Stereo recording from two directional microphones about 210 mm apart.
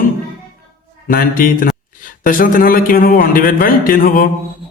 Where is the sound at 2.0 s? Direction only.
40° left (ahead or behind).